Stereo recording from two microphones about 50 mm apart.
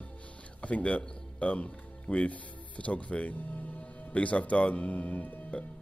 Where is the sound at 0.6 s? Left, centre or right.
Left.